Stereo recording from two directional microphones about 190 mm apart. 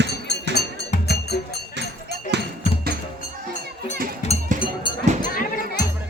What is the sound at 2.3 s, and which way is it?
Music, 60° right (ahead or behind).